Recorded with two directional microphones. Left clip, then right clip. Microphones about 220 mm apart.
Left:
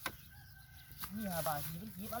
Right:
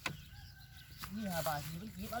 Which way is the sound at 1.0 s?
45° left (ahead or behind).